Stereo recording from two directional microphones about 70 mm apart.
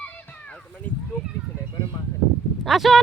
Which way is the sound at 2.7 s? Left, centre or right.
Centre.